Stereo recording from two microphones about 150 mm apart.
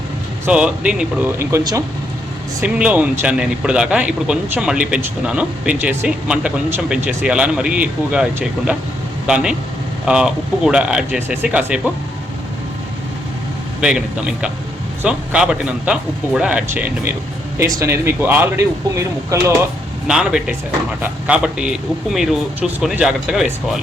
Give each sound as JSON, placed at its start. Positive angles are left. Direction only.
{"t": 0.4, "sound": "a man's voice", "side_deg": -5}
{"t": 13.8, "sound": "speech", "side_deg": -5}
{"t": 20.1, "sound": "a man's voice", "side_deg": -5}